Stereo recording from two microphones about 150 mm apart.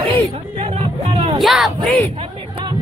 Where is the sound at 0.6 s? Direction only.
40° right (ahead or behind).